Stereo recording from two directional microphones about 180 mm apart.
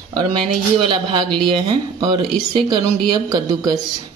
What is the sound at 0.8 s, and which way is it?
A man's voice, 25° right (ahead or behind).